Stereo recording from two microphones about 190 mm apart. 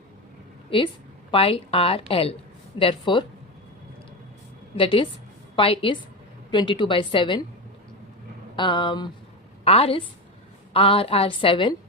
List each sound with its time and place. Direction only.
0.7 s a woman's voice: 25° left (ahead or behind)
4.8 s a woman's voice: 30° left (ahead or behind)
8.5 s a woman's voice: 25° left (ahead or behind)